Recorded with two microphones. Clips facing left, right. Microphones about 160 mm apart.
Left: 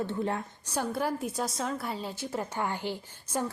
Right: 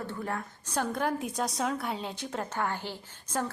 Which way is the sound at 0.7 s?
5° left (ahead or behind).